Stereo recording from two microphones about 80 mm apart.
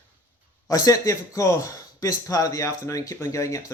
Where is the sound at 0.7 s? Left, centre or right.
Left.